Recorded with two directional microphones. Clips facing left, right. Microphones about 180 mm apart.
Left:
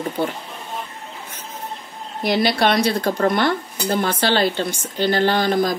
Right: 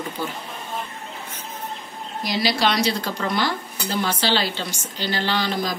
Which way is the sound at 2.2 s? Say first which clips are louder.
Left 4 dB; 55° left (ahead or behind).